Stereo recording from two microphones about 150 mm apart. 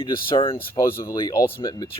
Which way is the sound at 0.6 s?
15° left (ahead or behind).